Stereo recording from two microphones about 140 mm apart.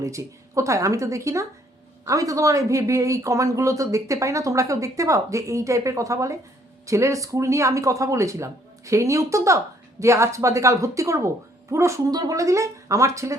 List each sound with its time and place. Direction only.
0.0 s speech: 20° right (ahead or behind)